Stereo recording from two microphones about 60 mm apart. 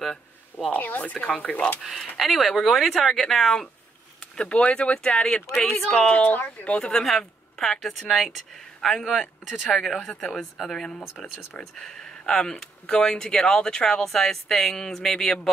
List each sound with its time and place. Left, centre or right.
0.7 s speech: left
1.8 s speech: centre; by 6.9 s left
6.9 s speech: centre